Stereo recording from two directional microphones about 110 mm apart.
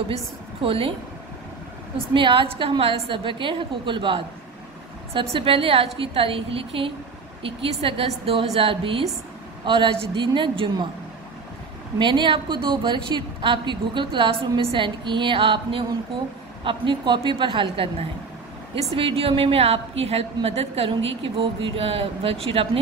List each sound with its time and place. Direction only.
0.1 s speech: 55° right (ahead or behind)
2.1 s a woman's voice: 50° right (ahead or behind)
12.0 s a woman's voice: 45° right (ahead or behind)
18.9 s speech: 55° right (ahead or behind)
20.9 s speech: 55° right (ahead or behind)